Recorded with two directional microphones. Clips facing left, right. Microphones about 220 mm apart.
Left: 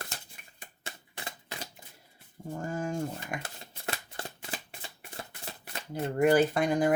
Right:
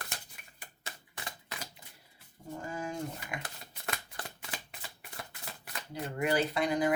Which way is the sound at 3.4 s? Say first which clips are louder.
Left 3 dB; 25° left (ahead or behind).